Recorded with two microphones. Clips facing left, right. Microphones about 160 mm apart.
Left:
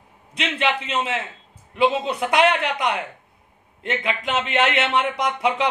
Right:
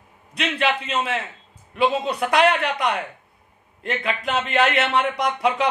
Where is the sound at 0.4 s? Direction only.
20° left (ahead or behind).